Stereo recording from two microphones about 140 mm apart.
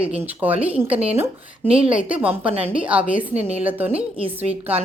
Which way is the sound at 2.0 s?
10° right (ahead or behind).